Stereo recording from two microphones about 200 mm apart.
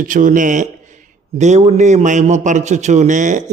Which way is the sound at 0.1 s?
40° right (ahead or behind).